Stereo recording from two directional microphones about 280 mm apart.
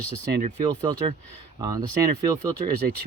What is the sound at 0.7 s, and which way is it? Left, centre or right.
Speech, centre.